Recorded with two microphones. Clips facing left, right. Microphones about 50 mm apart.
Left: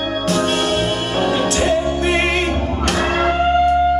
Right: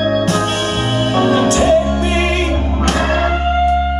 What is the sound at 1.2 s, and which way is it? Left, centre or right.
Music, right.